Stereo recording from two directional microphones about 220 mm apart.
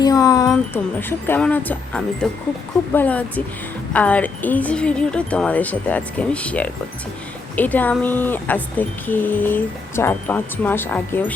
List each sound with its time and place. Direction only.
0.0 s wind chime: 15° left (ahead or behind)
0.5 s a woman's voice: 10° left (ahead or behind)